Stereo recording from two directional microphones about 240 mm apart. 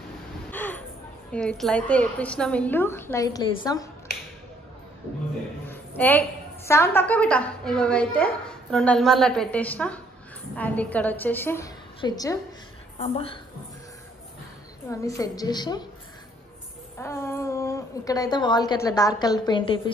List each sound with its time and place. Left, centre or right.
0.5 s a sound: centre
1.3 s a woman's voice: centre
5.7 s a woman's voice: centre; by 13.3 s left
14.9 s a woman's voice: centre
17.0 s a woman's voice: centre